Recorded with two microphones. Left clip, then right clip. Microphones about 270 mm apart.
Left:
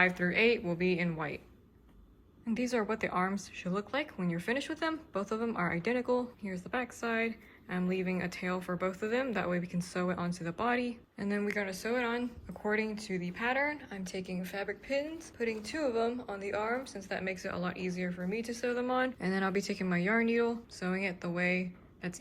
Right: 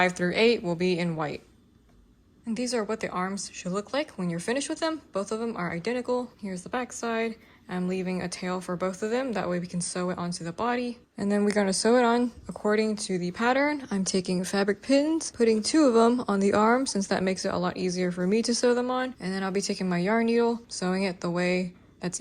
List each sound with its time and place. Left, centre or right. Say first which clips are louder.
0.0 s speech: right 5 dB; centre
2.5 s speech: right 4 dB; centre